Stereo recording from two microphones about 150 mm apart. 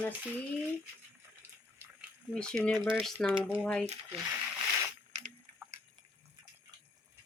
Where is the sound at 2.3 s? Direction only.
5° left (ahead or behind).